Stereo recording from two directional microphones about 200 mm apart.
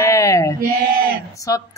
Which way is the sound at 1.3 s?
15° left (ahead or behind).